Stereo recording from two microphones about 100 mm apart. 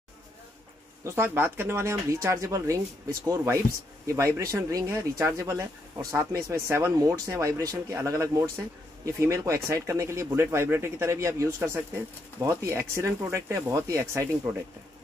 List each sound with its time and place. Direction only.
1.0 s speech: 25° right (ahead or behind)